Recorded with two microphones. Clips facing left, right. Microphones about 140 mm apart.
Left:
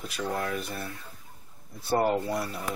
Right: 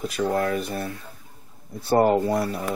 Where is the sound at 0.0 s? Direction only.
45° right (ahead or behind).